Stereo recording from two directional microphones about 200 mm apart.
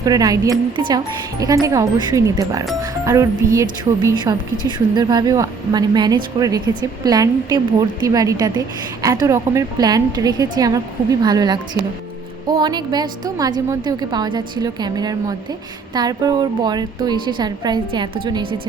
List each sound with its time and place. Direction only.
0.0 s a woman's voice: 20° right (ahead or behind)